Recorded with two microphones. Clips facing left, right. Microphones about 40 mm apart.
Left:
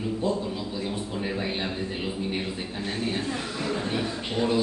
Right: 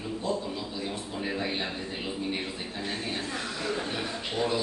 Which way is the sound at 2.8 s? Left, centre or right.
Centre.